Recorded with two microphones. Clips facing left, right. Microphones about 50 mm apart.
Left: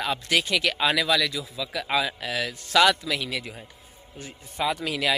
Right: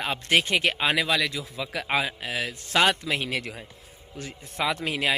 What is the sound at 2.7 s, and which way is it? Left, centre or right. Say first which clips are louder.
Speech: left 2 dB; right.